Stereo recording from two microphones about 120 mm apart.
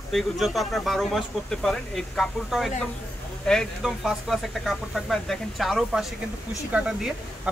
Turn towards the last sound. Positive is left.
turn(degrees=-5)  # may be behind; listen again after turning